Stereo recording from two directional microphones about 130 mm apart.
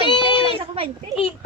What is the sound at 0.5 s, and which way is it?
Speech, 45° right (ahead or behind).